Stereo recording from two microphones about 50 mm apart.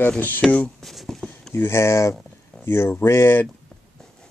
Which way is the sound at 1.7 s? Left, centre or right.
Left.